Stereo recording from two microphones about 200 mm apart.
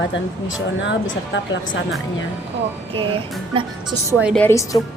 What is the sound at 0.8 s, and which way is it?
A woman's voice, 65° left (ahead or behind).